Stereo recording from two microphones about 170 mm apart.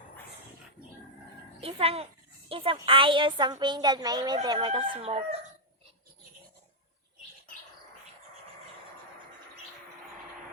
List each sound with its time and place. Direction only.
1.6 s a woman's voice: 35° right (ahead or behind)